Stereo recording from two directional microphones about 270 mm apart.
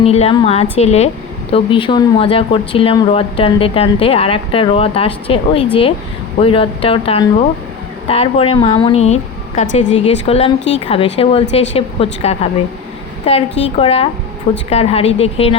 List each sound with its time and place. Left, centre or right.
0.0 s a woman's voice: left